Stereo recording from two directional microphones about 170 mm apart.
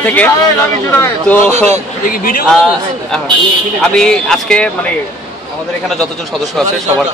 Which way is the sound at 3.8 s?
5° left (ahead or behind).